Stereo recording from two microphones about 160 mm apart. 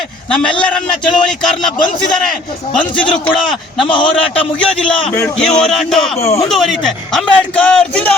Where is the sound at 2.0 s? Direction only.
5° left (ahead or behind).